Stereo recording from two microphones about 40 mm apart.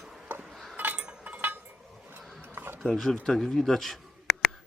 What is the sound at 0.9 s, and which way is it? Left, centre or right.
Chink, right.